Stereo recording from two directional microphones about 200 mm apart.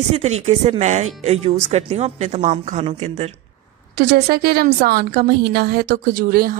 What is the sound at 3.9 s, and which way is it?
A woman's voice, 50° right (ahead or behind).